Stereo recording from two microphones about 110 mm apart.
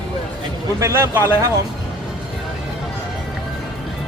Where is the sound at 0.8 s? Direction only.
25° right (ahead or behind).